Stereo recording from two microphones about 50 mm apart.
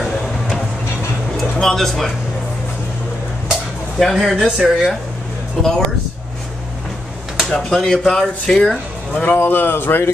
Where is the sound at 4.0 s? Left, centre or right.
Centre.